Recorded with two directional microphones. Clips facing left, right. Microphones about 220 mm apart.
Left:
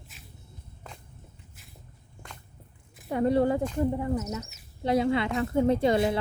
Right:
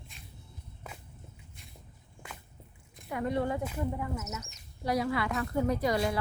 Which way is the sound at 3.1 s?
30° left (ahead or behind).